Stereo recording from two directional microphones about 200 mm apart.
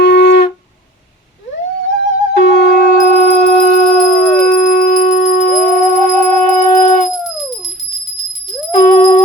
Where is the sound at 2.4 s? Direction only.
50° left (ahead or behind).